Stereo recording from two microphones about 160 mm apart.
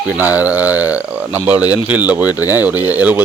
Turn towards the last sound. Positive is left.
turn(degrees=-10)  # may be behind; listen again after turning